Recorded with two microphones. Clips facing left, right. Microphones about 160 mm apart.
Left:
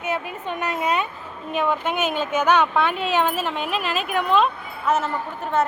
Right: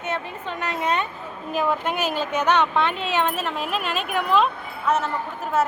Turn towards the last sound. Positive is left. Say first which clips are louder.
# left 1 dB
turn(degrees=-5)  # may be behind; listen again after turning